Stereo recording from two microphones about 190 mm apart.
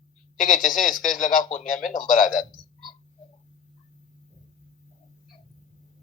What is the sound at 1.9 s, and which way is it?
Speech, 45° left (ahead or behind).